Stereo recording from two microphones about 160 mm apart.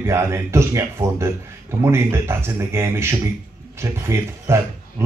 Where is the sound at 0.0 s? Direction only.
15° right (ahead or behind).